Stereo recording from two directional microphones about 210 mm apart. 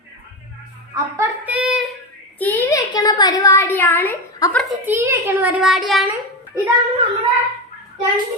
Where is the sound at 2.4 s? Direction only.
10° left (ahead or behind).